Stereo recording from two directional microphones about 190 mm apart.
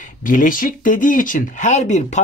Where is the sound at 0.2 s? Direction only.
45° left (ahead or behind).